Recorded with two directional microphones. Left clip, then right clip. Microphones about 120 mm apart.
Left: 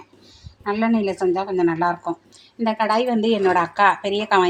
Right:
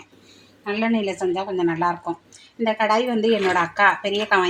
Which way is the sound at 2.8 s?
Centre (ahead or behind).